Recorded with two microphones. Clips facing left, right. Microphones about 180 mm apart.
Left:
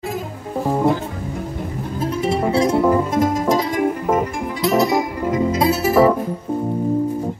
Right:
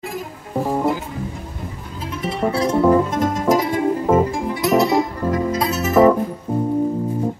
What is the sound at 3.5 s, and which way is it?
Music, 25° right (ahead or behind).